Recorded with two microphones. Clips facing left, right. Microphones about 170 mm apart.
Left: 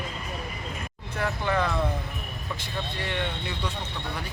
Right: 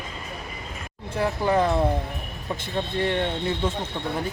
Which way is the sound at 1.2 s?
30° right (ahead or behind).